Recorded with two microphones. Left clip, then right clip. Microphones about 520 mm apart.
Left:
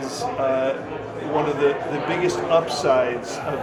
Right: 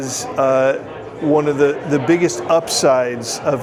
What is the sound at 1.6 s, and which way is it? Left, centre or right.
A man's voice, right.